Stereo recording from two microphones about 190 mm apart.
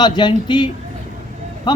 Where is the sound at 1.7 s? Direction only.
20° left (ahead or behind).